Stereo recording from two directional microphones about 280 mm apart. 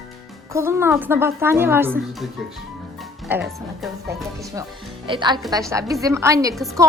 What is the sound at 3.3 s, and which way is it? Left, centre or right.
Speech, centre.